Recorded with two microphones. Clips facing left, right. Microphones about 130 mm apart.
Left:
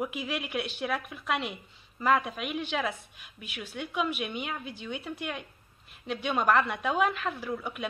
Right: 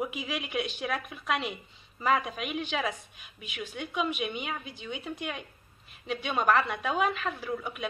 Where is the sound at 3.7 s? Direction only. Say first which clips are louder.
Left 1 dB; 15° right (ahead or behind).